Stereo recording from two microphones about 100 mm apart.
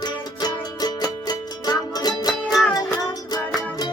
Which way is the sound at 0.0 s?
45° left (ahead or behind).